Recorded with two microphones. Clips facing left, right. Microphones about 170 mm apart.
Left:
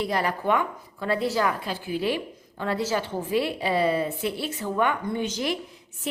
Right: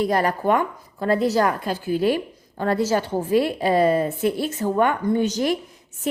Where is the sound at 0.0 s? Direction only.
45° right (ahead or behind).